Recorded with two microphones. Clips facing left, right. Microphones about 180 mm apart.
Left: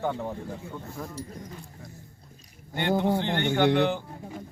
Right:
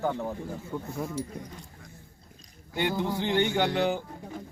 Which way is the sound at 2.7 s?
65° left (ahead or behind).